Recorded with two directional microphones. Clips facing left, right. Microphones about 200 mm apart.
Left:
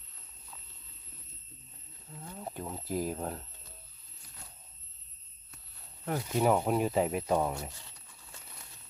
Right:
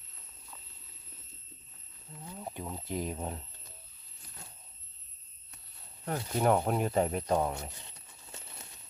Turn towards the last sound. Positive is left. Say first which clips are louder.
# even
turn(degrees=5)  # may be behind; listen again after turning